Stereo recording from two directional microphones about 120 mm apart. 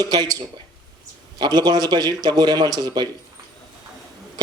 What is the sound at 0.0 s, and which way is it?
Speech, 30° right (ahead or behind).